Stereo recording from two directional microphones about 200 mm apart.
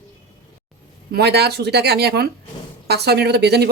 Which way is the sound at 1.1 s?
55° right (ahead or behind).